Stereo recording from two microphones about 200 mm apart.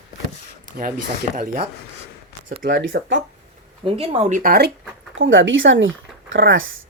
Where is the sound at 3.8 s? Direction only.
25° right (ahead or behind); by 4.7 s 45° right (ahead or behind).